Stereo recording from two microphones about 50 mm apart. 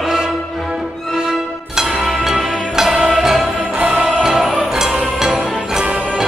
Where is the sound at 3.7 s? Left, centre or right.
Right.